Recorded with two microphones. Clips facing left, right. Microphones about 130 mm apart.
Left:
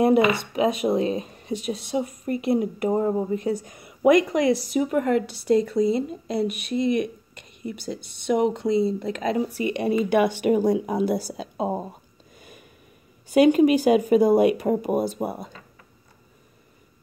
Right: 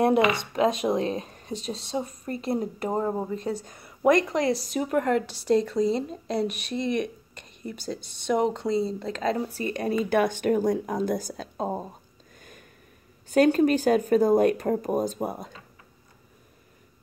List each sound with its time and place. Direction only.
0.4 s a woman's voice: 5° left (ahead or behind)
12.4 s a sound: 10° left (ahead or behind)
13.3 s speech: 10° left (ahead or behind)